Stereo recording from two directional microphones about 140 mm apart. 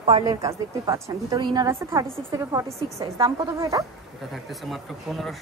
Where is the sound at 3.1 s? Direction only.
35° right (ahead or behind).